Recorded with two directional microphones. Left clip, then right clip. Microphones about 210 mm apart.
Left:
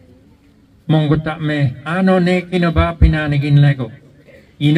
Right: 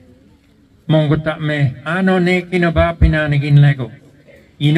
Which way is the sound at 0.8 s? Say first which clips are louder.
Right 2 dB; 20° right (ahead or behind).